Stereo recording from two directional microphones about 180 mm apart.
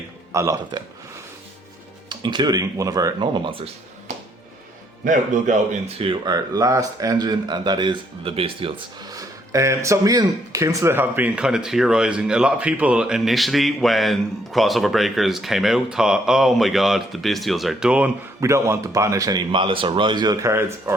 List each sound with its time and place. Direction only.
0.3 s speech: 20° right (ahead or behind)
2.0 s speech: 25° right (ahead or behind)
5.0 s a man's voice: 45° right (ahead or behind)
6.0 s a man's voice: 25° right (ahead or behind)